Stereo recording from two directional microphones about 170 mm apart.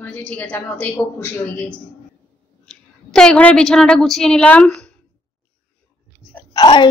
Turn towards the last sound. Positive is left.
turn(degrees=25)  # may be behind; listen again after turning